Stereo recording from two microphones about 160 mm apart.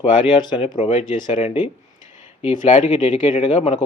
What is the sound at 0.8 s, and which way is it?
Speech, 50° left (ahead or behind).